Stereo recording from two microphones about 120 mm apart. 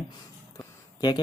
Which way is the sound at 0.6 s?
35° left (ahead or behind).